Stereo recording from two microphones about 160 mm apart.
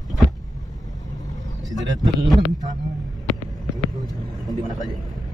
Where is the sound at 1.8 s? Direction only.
25° right (ahead or behind).